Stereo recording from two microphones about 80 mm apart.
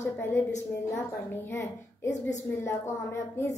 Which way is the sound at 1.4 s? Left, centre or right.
Left.